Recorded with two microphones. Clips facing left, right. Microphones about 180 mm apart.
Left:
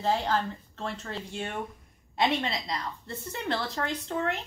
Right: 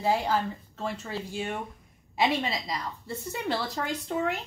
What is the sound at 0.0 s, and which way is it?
Speech, 10° right (ahead or behind).